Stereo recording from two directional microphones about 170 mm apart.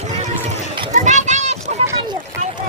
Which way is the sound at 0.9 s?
45° right (ahead or behind).